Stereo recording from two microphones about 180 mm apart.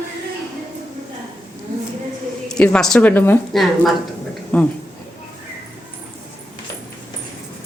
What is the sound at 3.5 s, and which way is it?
A woman's voice, centre (ahead or behind).